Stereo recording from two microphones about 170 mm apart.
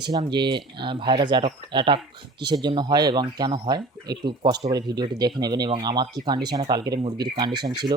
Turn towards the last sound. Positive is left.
turn(degrees=-25)  # may be behind; listen again after turning